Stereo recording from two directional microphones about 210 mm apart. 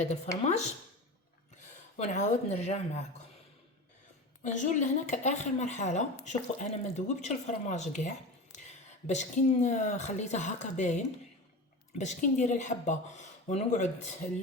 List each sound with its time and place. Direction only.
0.0 s speech: 35° left (ahead or behind)
4.4 s speech: 35° left (ahead or behind)